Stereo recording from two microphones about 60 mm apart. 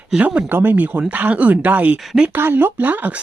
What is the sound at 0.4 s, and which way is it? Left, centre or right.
Speech, right.